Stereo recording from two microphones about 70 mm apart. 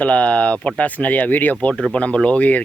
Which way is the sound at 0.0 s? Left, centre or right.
Centre.